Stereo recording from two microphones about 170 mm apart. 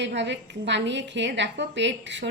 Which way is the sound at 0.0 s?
90° right.